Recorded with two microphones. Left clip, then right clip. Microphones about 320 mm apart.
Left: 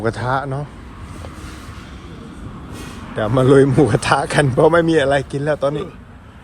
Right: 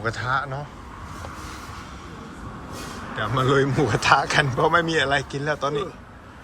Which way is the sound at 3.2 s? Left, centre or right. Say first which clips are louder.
Left 8 dB; centre.